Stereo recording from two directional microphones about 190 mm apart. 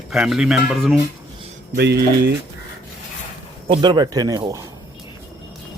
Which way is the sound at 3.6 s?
25° right (ahead or behind).